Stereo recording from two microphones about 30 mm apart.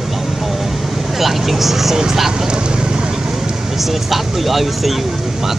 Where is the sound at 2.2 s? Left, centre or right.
Right.